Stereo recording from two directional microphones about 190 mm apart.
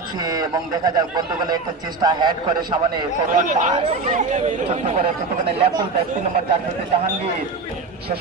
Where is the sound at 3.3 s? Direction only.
45° right (ahead or behind).